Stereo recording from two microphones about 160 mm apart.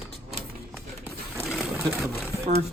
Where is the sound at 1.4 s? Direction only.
Centre (ahead or behind).